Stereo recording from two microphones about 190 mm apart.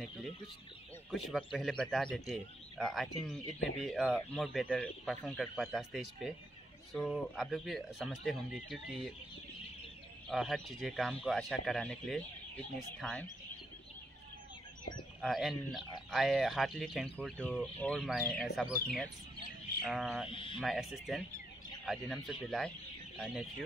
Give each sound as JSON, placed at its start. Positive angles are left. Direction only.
{"t": 1.1, "sound": "speech", "side_deg": 0}
{"t": 10.3, "sound": "speech", "side_deg": 0}
{"t": 15.1, "sound": "speech", "side_deg": 0}
{"t": 19.8, "sound": "speech", "side_deg": 0}
{"t": 20.2, "sound": "speech", "side_deg": 25}
{"t": 20.6, "sound": "speech", "side_deg": 0}